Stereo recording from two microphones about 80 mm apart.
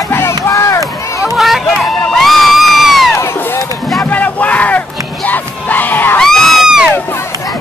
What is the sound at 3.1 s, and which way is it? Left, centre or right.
Run, left.